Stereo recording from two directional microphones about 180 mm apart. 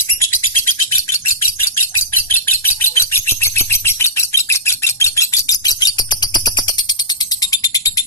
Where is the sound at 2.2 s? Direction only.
15° left (ahead or behind).